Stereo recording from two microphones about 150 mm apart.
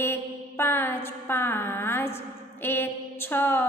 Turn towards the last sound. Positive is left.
turn(degrees=15)  # may be behind; listen again after turning